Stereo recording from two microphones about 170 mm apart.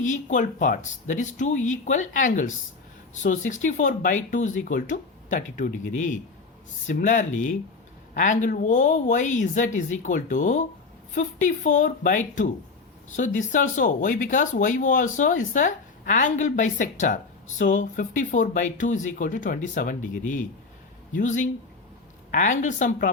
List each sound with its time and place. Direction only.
0.0 s speech: 45° left (ahead or behind)